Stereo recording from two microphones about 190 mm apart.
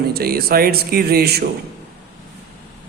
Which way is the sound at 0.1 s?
55° right (ahead or behind).